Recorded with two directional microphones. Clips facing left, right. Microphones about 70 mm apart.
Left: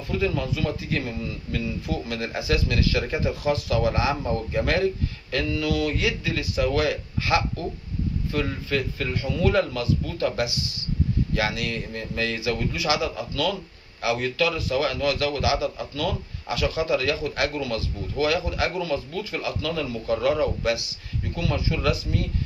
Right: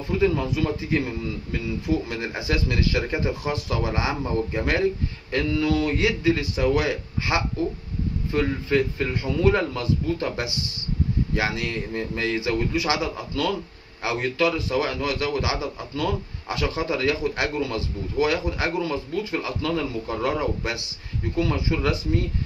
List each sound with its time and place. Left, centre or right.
0.2 s a man's voice: right
2.0 s a man's voice: right
5.3 s a man's voice: right